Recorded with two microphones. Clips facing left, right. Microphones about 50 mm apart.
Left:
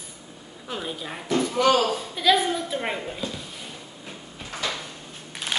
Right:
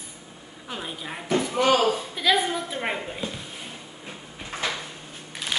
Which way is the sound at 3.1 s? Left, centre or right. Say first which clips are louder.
Even; right.